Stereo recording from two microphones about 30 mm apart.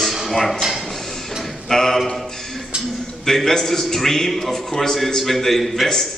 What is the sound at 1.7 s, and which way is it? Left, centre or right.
Speech, centre.